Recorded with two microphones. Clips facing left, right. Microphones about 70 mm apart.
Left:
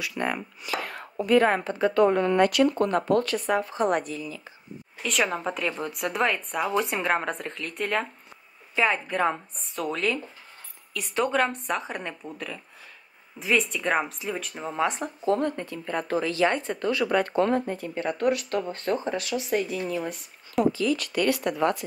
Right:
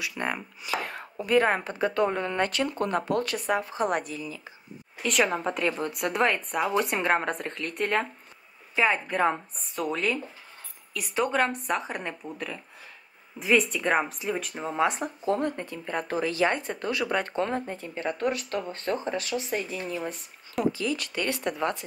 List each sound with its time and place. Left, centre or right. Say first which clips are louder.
0.1 s a woman's voice: left 2 dB; centre
2.1 s speech: left 6 dB; right
2.7 s a woman's voice: left 4 dB; centre
17.4 s speech: left 5 dB; right
18.5 s speech: left 3 dB; left
19.1 s speech: left 3 dB; right